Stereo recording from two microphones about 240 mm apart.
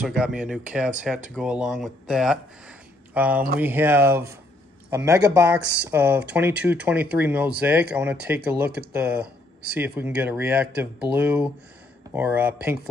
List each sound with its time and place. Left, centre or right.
0.0 s speech: centre
5.6 s speech: right
5.9 s speech: centre